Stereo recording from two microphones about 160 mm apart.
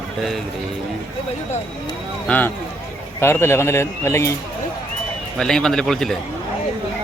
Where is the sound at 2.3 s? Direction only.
10° left (ahead or behind).